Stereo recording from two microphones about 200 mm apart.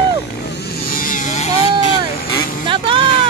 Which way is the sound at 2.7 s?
25° right (ahead or behind).